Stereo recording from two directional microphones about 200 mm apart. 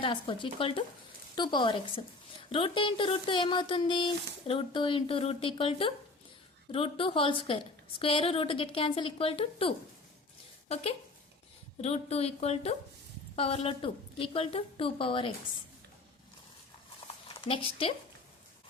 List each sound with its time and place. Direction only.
0.0 s a woman's voice: 25° left (ahead or behind)
11.8 s a woman's voice: 30° left (ahead or behind)
17.2 s speech: 25° left (ahead or behind)